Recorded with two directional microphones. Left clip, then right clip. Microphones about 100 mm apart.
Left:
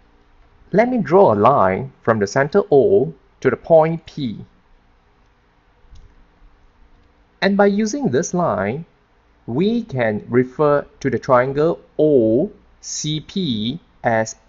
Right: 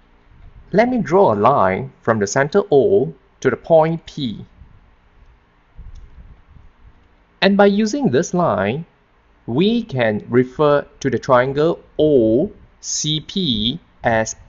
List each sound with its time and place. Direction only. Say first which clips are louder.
0.7 s speech: even; 10° left (ahead or behind)
7.4 s speech: right 2 dB; 5° left (ahead or behind)